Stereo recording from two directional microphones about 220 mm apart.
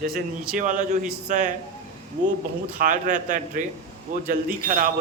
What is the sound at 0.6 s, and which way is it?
Speech, 35° right (ahead or behind).